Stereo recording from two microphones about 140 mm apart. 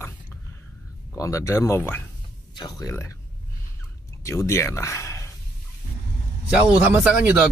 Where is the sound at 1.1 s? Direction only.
20° left (ahead or behind).